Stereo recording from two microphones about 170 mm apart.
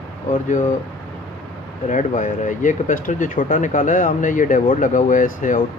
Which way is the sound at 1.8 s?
45° left (ahead or behind).